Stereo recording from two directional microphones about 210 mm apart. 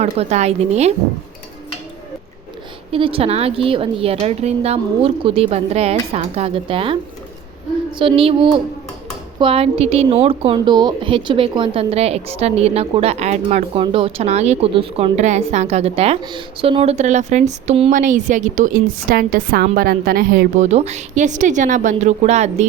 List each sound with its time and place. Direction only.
0.0 s a woman's voice: 30° right (ahead or behind)
2.9 s a woman's voice: 25° right (ahead or behind)